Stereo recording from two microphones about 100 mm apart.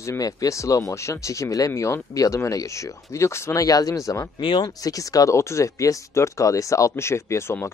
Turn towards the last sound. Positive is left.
turn(degrees=30)  # may be behind; listen again after turning